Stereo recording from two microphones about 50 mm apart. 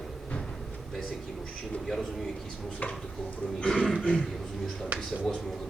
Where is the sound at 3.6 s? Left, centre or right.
Centre.